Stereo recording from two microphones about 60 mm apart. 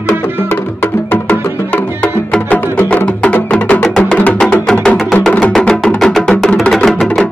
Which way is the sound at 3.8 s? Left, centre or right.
Centre.